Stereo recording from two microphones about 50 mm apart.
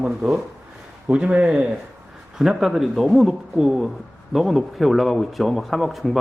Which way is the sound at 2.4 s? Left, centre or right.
Centre.